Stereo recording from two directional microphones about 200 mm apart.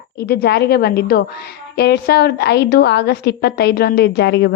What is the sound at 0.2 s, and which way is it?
A woman's voice, 50° left (ahead or behind).